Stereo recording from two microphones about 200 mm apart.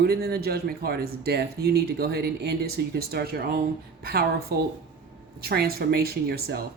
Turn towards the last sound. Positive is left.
turn(degrees=-50)  # may be behind; listen again after turning